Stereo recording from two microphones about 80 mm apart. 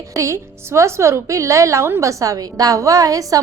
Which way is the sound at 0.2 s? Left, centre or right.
Right.